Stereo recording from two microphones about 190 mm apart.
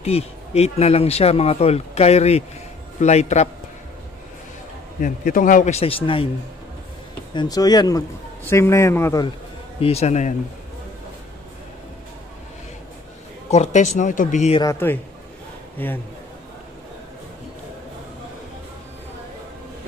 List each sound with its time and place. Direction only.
0.0 s speech: 35° left (ahead or behind)
5.0 s speech: 45° left (ahead or behind); by 6.2 s 30° left (ahead or behind)
7.3 s a man's voice: 20° left (ahead or behind)
9.8 s speech: 35° left (ahead or behind)
13.5 s speech: 35° left (ahead or behind)
14.6 s a man's voice: 15° left (ahead or behind)